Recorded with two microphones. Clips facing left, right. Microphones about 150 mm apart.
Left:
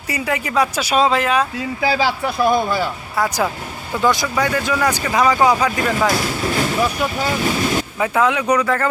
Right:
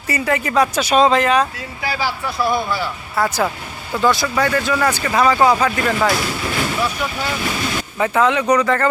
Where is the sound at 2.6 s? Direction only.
45° left (ahead or behind).